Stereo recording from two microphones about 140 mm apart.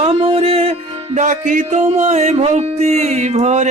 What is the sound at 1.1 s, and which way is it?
Music, 65° right (ahead or behind).